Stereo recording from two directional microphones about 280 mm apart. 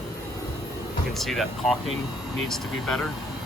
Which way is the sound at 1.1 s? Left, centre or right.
Centre.